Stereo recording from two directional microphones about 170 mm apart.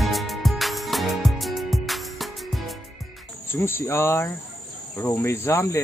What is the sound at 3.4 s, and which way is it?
Speech, 15° left (ahead or behind).